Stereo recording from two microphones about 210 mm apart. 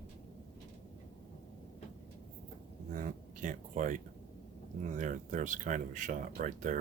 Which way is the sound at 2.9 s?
40° right (ahead or behind).